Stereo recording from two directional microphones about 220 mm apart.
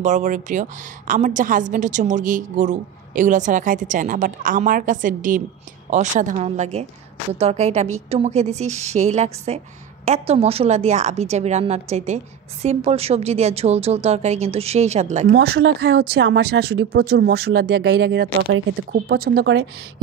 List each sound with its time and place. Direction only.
0.0 s a woman's voice: 35° right (ahead or behind)
15.2 s speech: 50° right (ahead or behind)